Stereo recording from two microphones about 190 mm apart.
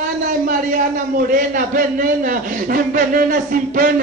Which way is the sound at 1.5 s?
50° right (ahead or behind).